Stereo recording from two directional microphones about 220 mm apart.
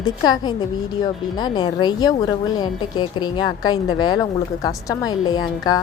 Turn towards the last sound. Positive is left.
turn(degrees=20)  # may be behind; listen again after turning